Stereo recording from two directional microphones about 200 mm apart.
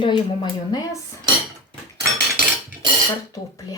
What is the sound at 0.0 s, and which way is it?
Speech, 20° left (ahead or behind).